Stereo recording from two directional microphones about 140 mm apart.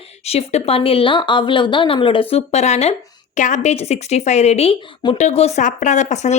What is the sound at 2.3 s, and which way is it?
Speech, 50° left (ahead or behind).